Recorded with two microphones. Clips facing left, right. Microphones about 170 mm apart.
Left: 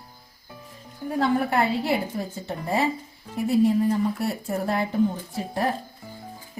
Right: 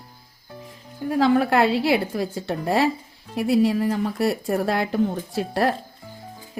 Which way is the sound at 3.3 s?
90° right.